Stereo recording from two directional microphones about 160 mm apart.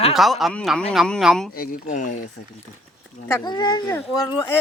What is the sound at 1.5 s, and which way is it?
Speech, 60° left (ahead or behind).